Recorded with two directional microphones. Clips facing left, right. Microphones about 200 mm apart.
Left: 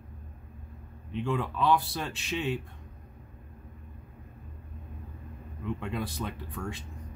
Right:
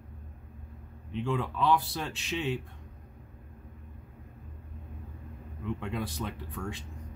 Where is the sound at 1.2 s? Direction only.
5° left (ahead or behind).